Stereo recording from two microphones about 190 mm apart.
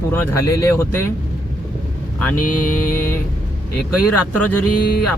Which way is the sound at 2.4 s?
45° left (ahead or behind).